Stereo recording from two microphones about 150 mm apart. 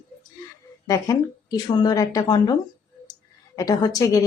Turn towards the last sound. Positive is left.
turn(degrees=25)  # may be behind; listen again after turning